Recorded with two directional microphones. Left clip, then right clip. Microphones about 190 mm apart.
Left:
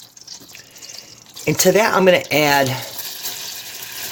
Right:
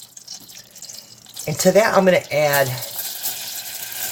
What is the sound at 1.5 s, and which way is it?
Speech, 40° left (ahead or behind).